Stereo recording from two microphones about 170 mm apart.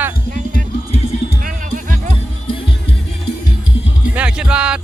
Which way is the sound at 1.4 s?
55° right (ahead or behind).